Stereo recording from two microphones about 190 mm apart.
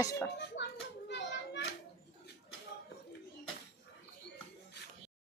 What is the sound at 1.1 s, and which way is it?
Children playing, 65° left (ahead or behind).